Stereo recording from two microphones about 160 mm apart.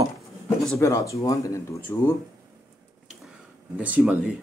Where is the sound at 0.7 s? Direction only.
20° left (ahead or behind).